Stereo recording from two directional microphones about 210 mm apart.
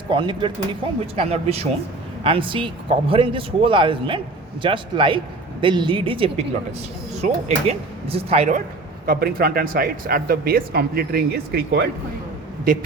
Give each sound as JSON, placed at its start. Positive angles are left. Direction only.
{"t": 0.1, "sound": "speech", "side_deg": -20}
{"t": 9.0, "sound": "speech", "side_deg": -45}